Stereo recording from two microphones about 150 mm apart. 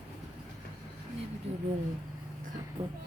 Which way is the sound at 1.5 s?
45° right (ahead or behind).